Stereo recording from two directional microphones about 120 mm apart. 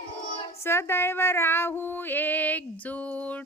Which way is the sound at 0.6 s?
20° left (ahead or behind).